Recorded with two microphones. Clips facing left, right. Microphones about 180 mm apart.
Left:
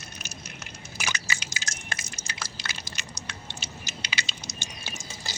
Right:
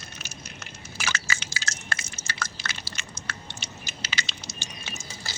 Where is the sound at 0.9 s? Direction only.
15° left (ahead or behind).